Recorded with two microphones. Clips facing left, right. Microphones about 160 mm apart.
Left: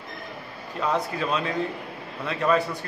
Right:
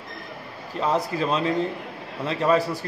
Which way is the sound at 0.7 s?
30° right (ahead or behind).